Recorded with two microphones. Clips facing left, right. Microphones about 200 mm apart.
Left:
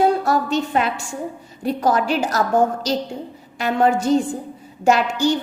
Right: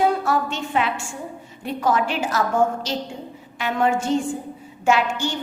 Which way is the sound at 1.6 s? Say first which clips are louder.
Left 3 dB; 40° left (ahead or behind).